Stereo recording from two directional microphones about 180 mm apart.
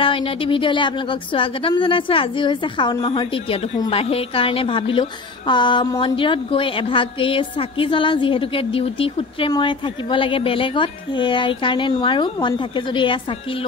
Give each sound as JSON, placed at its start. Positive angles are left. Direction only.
{"t": 0.0, "sound": "a woman's voice", "side_deg": 30}